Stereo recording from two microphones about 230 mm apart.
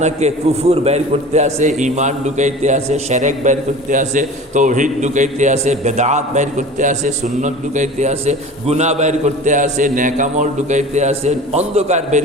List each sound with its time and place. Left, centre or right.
0.0 s a man's voice: right